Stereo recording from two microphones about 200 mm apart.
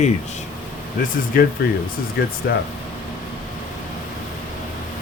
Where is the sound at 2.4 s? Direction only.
55° left (ahead or behind).